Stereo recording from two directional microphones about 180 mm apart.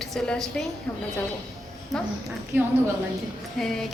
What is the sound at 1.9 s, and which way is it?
Speech, centre (ahead or behind).